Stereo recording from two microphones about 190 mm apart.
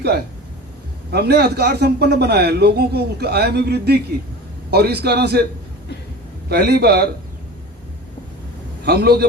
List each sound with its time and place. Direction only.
1.1 s a man's voice: 60° right (ahead or behind)
6.5 s a man's voice: 60° right (ahead or behind)
8.8 s a man's voice: 60° right (ahead or behind)